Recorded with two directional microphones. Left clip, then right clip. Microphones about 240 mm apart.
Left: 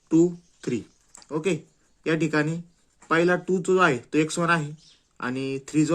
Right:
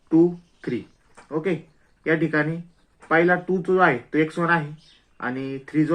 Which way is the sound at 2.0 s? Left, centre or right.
Left.